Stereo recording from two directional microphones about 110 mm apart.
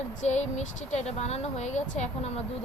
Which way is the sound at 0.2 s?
90° left.